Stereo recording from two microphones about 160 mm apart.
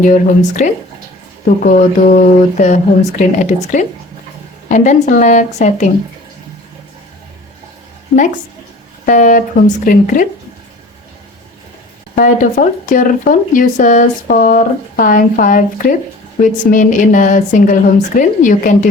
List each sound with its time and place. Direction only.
0.0 s speech: 50° left (ahead or behind)
9.0 s speech: 55° left (ahead or behind)
12.1 s speech: 55° left (ahead or behind)